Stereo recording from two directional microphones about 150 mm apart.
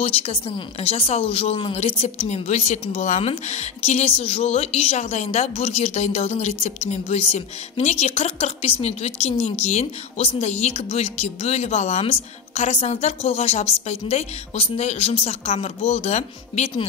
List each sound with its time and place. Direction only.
0.0 s speech: 40° left (ahead or behind)